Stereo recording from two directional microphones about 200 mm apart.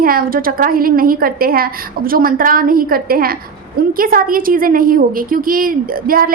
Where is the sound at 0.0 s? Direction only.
45° right (ahead or behind).